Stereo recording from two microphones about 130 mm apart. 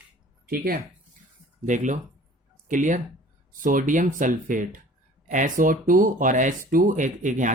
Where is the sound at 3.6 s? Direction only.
90° right.